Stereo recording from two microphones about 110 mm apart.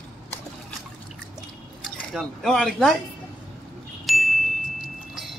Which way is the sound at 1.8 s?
Centre (ahead or behind).